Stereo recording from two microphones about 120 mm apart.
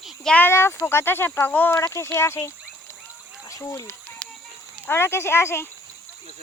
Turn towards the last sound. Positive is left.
turn(degrees=20)  # may be behind; listen again after turning